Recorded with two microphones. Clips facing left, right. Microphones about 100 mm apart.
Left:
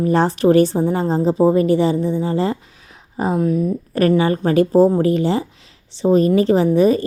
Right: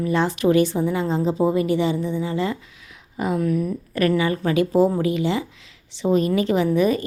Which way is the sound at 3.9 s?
35° left (ahead or behind).